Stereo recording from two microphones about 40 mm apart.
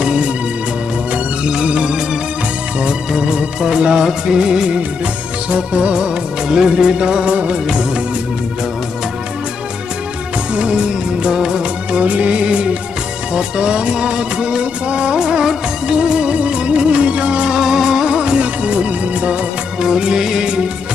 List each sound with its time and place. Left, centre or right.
0.0 s music: right
1.4 s music: right
3.1 s music: centre
4.0 s music of bollywood: centre
5.5 s music: right
10.5 s music of bollywood: right
12.0 s music: right
17.6 s music: centre
18.4 s music: right
19.8 s music of bollywood: centre